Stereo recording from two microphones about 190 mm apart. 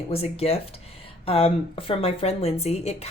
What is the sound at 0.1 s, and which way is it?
Speech, 30° left (ahead or behind).